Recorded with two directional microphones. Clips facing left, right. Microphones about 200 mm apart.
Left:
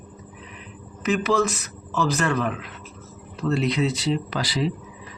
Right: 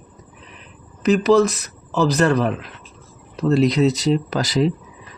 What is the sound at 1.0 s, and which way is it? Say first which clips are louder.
Speech: right 7 dB; 35° right (ahead or behind).